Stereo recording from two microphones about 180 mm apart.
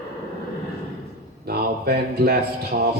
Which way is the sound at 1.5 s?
60° right (ahead or behind).